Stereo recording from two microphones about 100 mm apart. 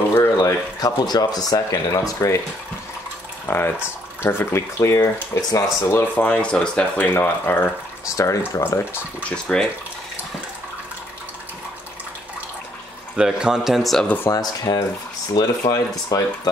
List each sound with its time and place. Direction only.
0.1 s speech: 30° left (ahead or behind)
3.4 s speech: 20° left (ahead or behind)
6.1 s speech: 10° left (ahead or behind)
7.2 s speech: 20° left (ahead or behind)
9.3 s speech: 10° left (ahead or behind)
13.1 s speech: 10° right (ahead or behind)
14.0 s speech: 20° left (ahead or behind)
14.3 s speech: 40° left (ahead or behind)